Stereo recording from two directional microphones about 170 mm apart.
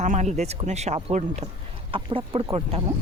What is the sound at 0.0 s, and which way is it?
Speech, 45° right (ahead or behind).